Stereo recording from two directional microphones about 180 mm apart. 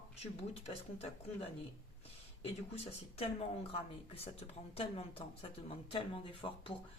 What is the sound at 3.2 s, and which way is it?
A woman's voice, 30° left (ahead or behind).